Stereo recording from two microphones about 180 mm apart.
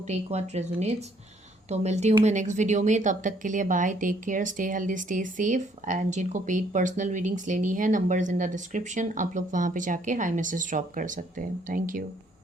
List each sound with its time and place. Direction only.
0.1 s speech: 40° right (ahead or behind)